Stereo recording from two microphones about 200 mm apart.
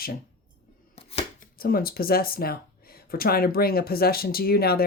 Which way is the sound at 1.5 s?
45° left (ahead or behind).